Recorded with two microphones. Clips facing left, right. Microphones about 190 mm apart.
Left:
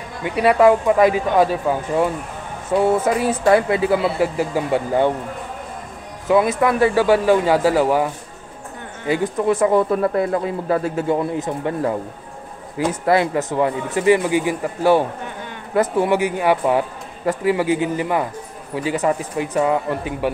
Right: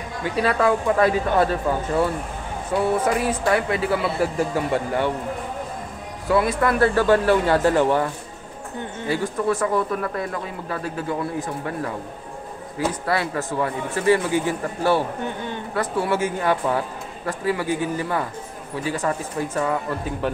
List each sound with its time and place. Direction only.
0.2 s speech: 15° left (ahead or behind)
6.2 s speech: 20° left (ahead or behind)
9.0 s speech: 20° left (ahead or behind)